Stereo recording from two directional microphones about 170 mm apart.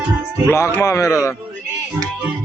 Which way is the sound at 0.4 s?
15° left (ahead or behind).